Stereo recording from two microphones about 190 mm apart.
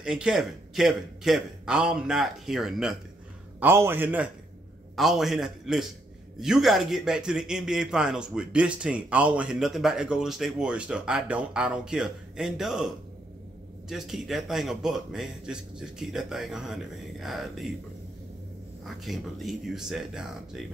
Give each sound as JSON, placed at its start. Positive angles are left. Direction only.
{"t": 0.0, "sound": "a man's voice", "side_deg": -5}
{"t": 18.9, "sound": "a man's voice", "side_deg": 0}